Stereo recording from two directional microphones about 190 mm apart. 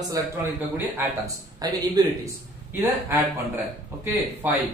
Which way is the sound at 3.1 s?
10° right (ahead or behind).